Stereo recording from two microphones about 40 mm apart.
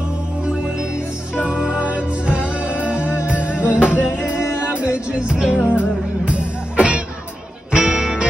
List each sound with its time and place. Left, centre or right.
1.3 s music: right
5.7 s music: right
7.7 s music: centre